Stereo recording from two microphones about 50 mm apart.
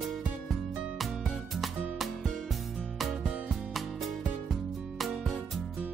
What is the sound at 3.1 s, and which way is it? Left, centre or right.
Music, centre.